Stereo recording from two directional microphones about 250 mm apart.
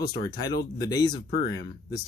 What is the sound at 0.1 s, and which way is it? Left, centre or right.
Speech, centre.